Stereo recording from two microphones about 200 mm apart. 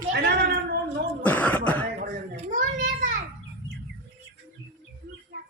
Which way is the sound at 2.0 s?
40° right (ahead or behind).